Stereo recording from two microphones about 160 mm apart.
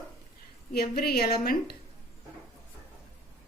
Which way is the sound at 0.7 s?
75° left (ahead or behind).